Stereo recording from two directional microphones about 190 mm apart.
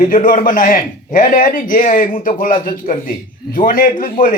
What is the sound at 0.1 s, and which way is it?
A man's voice, 45° left (ahead or behind).